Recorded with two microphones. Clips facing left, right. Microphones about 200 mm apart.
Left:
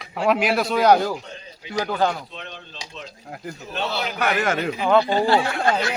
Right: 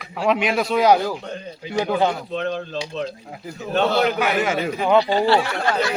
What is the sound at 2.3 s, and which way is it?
Speech, 45° right (ahead or behind).